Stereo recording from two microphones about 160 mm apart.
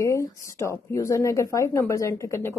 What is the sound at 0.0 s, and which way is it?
Speech, 20° left (ahead or behind).